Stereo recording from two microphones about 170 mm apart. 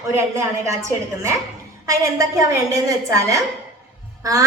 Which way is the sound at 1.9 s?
20° right (ahead or behind).